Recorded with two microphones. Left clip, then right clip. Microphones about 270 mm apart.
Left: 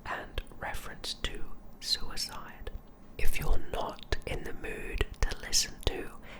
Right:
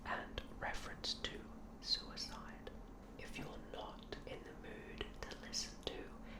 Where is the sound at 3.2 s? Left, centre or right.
Left.